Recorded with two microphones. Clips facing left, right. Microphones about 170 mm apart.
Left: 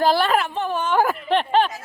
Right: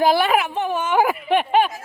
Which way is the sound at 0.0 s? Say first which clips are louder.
Right 1 dB; 10° right (ahead or behind).